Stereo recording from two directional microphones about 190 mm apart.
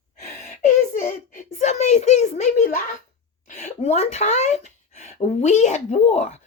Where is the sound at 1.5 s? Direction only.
35° left (ahead or behind).